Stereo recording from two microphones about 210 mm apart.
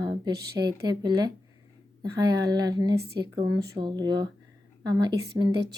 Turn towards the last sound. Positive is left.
turn(degrees=-20)  # may be behind; listen again after turning